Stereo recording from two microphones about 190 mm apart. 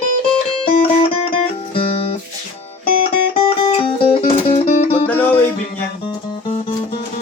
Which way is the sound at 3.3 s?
30° left (ahead or behind).